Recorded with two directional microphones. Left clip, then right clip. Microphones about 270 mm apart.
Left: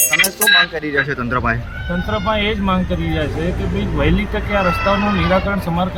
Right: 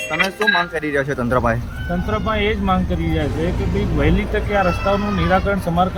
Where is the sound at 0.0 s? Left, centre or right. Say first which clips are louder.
Left 3 dB; centre.